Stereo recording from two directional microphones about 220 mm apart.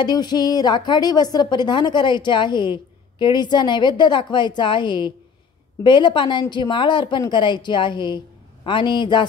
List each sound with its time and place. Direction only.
0.0 s a woman's voice: 20° left (ahead or behind)